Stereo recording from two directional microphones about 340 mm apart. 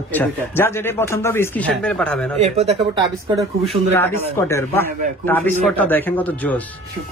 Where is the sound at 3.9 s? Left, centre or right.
Centre.